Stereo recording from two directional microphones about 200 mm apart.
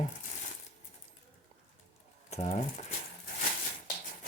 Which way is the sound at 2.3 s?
35° left (ahead or behind).